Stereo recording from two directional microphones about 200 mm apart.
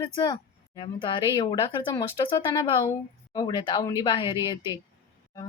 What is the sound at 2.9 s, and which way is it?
A woman's voice, 20° left (ahead or behind).